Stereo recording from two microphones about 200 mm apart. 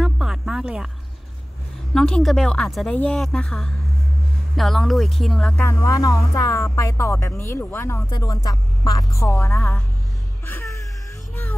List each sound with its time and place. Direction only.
0.0 s a sound: centre (ahead or behind)
2.0 s a woman's voice: 5° left (ahead or behind)
5.7 s speech: 15° left (ahead or behind)
10.4 s music: 10° left (ahead or behind)